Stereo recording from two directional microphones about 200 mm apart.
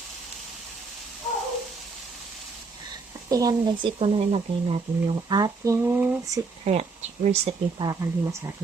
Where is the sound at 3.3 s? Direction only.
20° right (ahead or behind).